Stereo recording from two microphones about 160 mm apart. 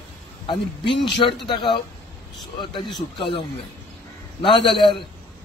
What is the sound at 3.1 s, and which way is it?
Speech, 30° left (ahead or behind).